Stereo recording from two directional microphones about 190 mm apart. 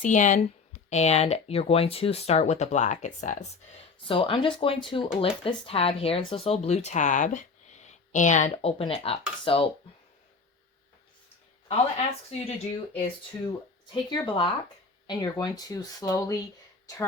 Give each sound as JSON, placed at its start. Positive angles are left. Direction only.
{"t": 0.0, "sound": "speech", "side_deg": 40}
{"t": 4.0, "sound": "speech", "side_deg": 25}
{"t": 12.3, "sound": "speech", "side_deg": 35}